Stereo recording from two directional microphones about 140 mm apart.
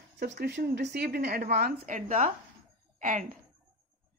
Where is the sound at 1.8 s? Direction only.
65° right (ahead or behind).